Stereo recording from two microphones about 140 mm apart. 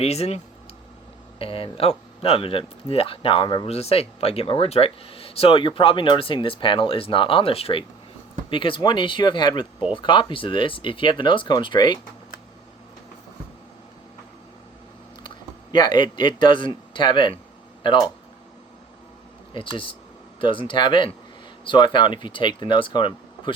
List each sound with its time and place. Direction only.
0.0 s speech: 50° left (ahead or behind); by 11.9 s 35° left (ahead or behind)
15.7 s speech: 30° left (ahead or behind)
19.5 s speech: 40° left (ahead or behind)